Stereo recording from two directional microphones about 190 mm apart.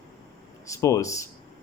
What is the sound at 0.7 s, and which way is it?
Speech, 15° left (ahead or behind).